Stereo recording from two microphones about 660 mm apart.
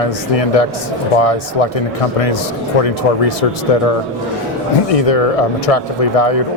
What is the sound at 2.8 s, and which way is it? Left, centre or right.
Speech, left.